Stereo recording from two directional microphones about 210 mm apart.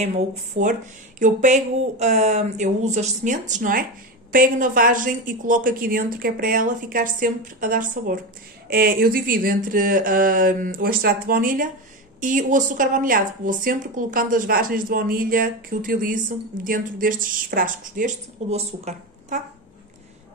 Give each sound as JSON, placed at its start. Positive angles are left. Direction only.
{"t": 0.0, "sound": "a woman's voice", "side_deg": -30}